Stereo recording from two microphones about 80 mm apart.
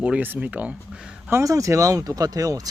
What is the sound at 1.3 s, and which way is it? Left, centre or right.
Speech, right.